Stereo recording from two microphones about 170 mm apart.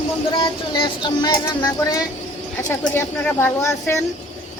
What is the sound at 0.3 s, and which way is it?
Music, 30° left (ahead or behind).